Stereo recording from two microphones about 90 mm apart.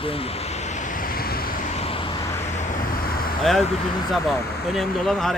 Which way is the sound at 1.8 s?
80° left.